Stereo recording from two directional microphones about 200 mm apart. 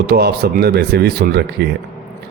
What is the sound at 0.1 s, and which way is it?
A man's voice, 55° right (ahead or behind).